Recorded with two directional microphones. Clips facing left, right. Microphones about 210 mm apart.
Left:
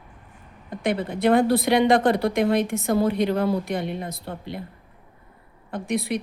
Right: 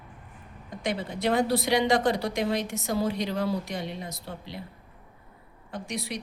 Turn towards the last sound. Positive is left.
turn(degrees=55)  # may be behind; listen again after turning